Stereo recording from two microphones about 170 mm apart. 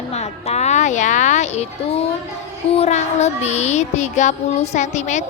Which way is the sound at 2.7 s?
40° left (ahead or behind).